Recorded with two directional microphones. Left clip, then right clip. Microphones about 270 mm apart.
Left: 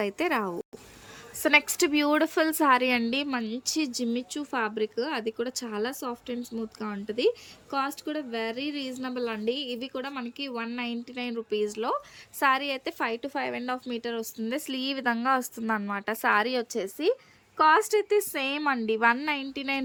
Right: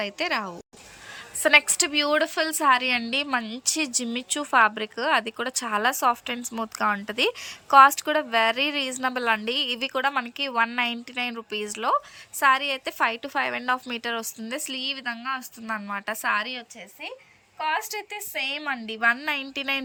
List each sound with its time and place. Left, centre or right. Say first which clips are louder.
0.0 s a woman's voice: right 1 dB; centre